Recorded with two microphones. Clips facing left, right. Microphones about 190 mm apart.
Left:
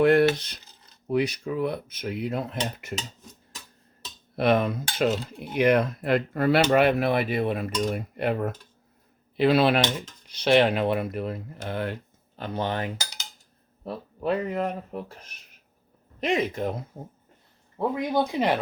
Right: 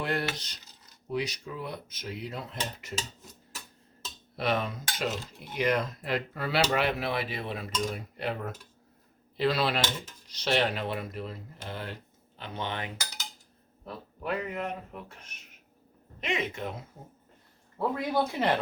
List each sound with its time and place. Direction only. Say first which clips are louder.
0.0 s rub: left 13 dB; 55° left (ahead or behind)
0.3 s speech: left 2 dB; 55° left (ahead or behind)
4.4 s speech: left 8 dB; 55° left (ahead or behind)
12.4 s speech: left 7 dB; 40° left (ahead or behind)
17.7 s speech: left 3 dB; 15° left (ahead or behind)